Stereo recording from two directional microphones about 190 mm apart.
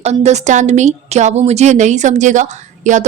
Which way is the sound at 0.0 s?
35° right (ahead or behind).